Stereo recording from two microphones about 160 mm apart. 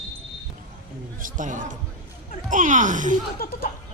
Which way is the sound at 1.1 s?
55° right (ahead or behind).